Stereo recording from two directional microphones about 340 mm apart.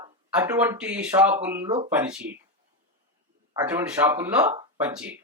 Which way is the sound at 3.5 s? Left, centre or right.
Centre.